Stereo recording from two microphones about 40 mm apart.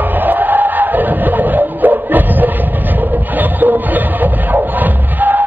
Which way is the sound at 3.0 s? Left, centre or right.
Right.